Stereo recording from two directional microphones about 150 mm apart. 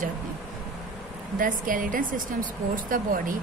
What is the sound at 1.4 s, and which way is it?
Speech, 65° right (ahead or behind).